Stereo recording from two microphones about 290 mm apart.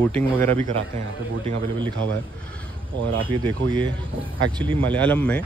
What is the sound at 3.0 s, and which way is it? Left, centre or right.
Speech, right.